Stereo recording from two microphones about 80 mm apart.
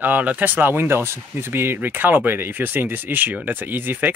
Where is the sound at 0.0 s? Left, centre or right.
Centre.